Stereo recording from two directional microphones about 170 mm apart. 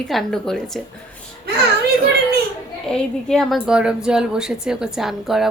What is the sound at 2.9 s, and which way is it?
A woman's voice, 5° left (ahead or behind).